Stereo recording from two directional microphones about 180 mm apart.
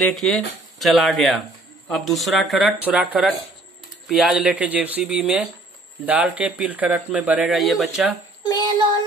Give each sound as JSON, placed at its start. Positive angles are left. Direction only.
{"t": 0.0, "sound": "speech", "side_deg": 0}